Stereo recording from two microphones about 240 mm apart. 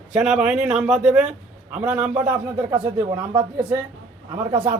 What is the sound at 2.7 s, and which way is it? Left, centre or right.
Speech, centre.